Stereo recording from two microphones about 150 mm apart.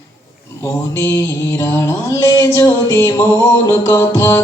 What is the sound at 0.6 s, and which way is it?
Mantra, 20° left (ahead or behind).